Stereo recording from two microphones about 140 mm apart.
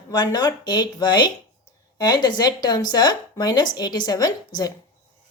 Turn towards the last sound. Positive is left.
turn(degrees=30)  # may be behind; listen again after turning